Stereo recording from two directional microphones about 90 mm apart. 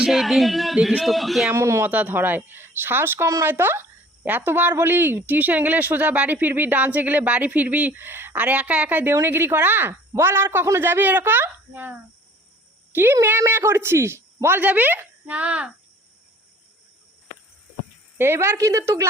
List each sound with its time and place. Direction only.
0.0 s speech: centre (ahead or behind)
1.5 s a woman's voice: 30° right (ahead or behind)
1.9 s speech: 20° right (ahead or behind)
18.2 s a woman's voice: 30° right (ahead or behind)